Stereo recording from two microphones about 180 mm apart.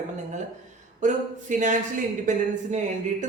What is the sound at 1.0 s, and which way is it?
Speech, 45° right (ahead or behind).